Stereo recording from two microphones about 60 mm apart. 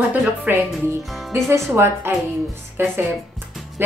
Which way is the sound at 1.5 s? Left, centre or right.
Right.